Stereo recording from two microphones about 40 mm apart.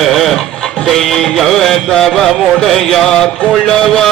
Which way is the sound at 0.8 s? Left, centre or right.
Centre.